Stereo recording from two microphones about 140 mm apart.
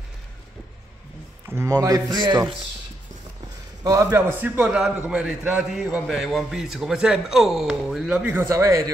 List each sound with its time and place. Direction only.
1.5 s speech: 25° right (ahead or behind)
3.8 s a man's voice: 25° right (ahead or behind)